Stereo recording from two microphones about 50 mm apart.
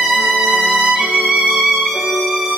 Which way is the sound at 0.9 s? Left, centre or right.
Centre.